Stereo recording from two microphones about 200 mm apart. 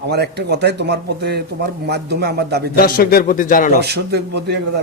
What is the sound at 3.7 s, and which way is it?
Speech, 55° right (ahead or behind).